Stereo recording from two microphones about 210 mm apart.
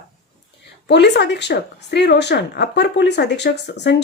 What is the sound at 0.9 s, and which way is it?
Speech, 55° left (ahead or behind).